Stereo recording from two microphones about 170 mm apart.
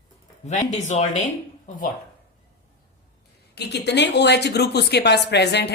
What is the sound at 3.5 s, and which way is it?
Speech, 75° left (ahead or behind).